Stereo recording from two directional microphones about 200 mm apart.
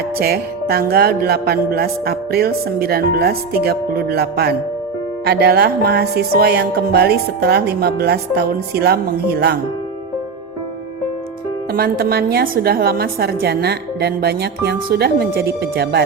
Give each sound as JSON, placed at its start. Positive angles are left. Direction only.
{"t": 0.2, "sound": "music", "side_deg": -50}
{"t": 11.7, "sound": "music", "side_deg": -50}